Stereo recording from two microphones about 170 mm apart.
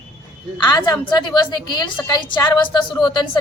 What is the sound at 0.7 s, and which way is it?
A woman's voice, 25° left (ahead or behind).